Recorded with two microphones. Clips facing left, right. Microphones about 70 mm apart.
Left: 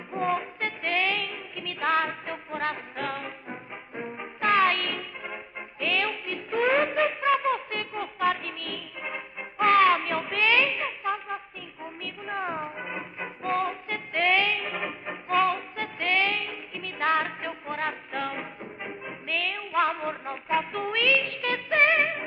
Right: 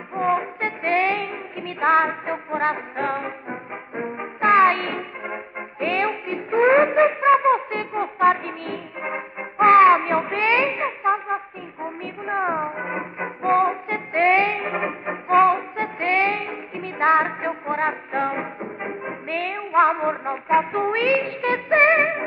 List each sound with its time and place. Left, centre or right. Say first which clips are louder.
0.1 s music: right 6 dB; right